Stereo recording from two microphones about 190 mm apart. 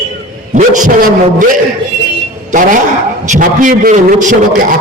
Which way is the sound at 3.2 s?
40° right (ahead or behind).